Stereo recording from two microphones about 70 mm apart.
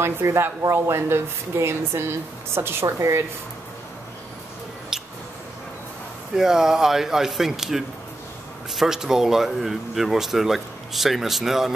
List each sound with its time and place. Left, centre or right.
0.0 s speech: right
6.3 s speech: centre